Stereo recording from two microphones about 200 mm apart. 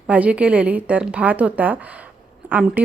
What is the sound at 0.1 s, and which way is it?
A woman's voice, 5° right (ahead or behind).